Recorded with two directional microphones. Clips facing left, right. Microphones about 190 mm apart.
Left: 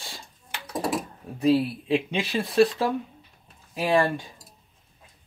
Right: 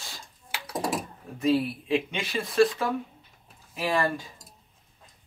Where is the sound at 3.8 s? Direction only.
25° left (ahead or behind).